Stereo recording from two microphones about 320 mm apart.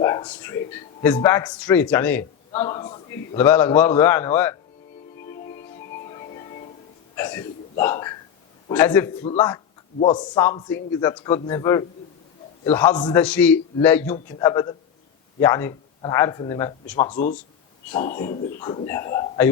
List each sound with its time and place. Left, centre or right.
0.0 s a sound: centre
0.7 s a man's voice: centre
5.9 s music: centre
7.2 s a man's voice: centre
9.2 s a man's voice: centre
18.0 s speech: left
18.6 s a man's voice: centre